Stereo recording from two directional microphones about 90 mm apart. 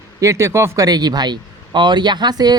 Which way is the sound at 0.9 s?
50° right (ahead or behind).